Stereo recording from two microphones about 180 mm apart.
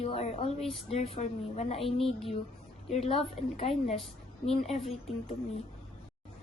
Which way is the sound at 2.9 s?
35° left (ahead or behind).